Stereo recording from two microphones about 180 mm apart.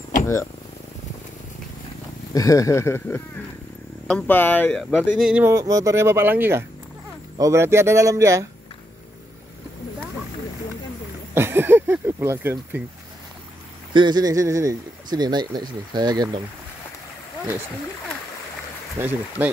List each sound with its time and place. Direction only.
2.3 s speech: 20° left (ahead or behind); by 8.5 s 15° right (ahead or behind)
11.3 s speech: 10° right (ahead or behind)
13.9 s speech: 25° right (ahead or behind)
18.9 s speech: 10° right (ahead or behind)